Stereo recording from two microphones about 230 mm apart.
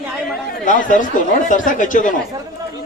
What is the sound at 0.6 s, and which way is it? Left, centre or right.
A man's voice, left.